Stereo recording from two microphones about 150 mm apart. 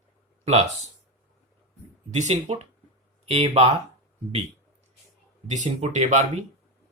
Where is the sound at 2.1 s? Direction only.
50° right (ahead or behind).